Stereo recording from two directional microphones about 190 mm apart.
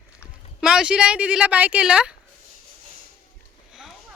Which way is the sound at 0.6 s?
5° right (ahead or behind).